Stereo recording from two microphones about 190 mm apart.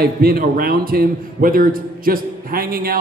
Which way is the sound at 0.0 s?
50° right (ahead or behind).